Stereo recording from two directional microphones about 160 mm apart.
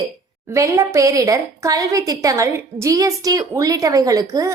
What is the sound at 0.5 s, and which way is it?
A woman's voice, 20° right (ahead or behind).